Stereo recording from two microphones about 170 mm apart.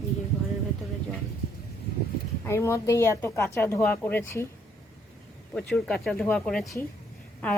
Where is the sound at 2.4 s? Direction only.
15° left (ahead or behind).